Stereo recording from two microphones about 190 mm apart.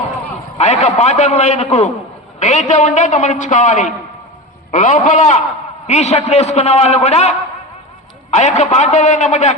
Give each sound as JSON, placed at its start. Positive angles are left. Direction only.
{"t": 0.6, "sound": "a man's voice", "side_deg": 40}